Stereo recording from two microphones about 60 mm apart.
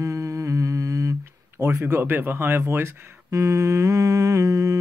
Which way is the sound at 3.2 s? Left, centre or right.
Right.